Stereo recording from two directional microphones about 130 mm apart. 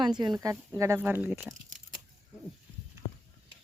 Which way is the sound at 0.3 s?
20° right (ahead or behind).